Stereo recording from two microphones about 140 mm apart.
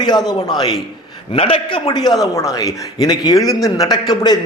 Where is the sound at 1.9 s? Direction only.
30° left (ahead or behind).